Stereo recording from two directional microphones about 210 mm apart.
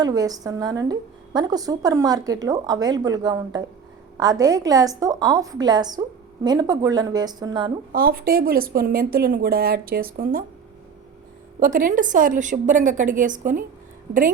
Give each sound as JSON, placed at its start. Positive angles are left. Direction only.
{"t": 0.0, "sound": "a woman's voice", "side_deg": -15}
{"t": 7.9, "sound": "speech", "side_deg": -45}
{"t": 11.6, "sound": "a woman's voice", "side_deg": -40}